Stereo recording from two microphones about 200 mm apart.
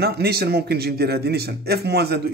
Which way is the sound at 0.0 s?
50° right (ahead or behind).